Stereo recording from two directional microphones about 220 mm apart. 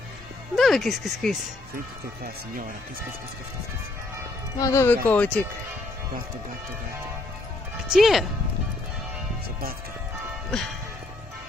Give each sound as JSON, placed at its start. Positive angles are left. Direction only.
{"t": 0.6, "sound": "speech", "side_deg": 0}
{"t": 2.2, "sound": "speech", "side_deg": -40}
{"t": 4.6, "sound": "speech", "side_deg": 15}
{"t": 7.9, "sound": "speech", "side_deg": 0}